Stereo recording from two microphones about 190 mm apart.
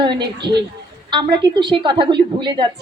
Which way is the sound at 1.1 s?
25° right (ahead or behind).